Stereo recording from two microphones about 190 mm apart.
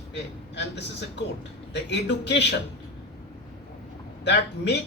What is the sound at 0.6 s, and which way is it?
Speech, 65° left (ahead or behind).